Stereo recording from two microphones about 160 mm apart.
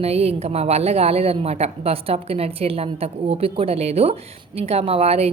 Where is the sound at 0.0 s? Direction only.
40° right (ahead or behind).